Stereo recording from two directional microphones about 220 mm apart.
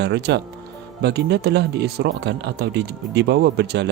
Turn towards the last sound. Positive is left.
turn(degrees=-50)  # may be behind; listen again after turning